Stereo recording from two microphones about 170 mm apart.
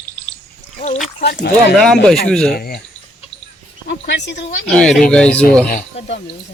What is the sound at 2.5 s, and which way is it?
Speech, 65° left (ahead or behind).